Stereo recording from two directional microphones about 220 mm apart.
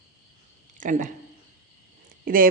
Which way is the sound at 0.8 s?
35° right (ahead or behind).